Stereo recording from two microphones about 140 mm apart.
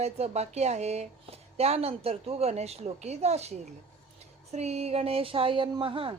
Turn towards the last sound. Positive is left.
turn(degrees=-40)  # may be behind; listen again after turning